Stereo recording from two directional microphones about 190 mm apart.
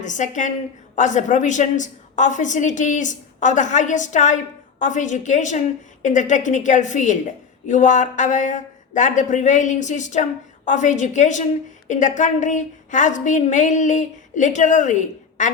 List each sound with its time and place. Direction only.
0.0 s a woman's voice: 40° left (ahead or behind)